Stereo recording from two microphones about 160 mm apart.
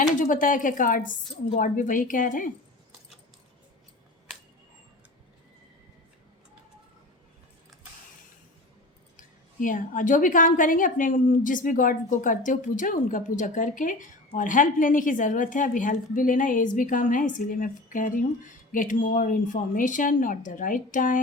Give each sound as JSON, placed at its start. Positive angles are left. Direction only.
{"t": 0.2, "sound": "a woman's voice", "side_deg": 55}
{"t": 9.1, "sound": "a woman's voice", "side_deg": 55}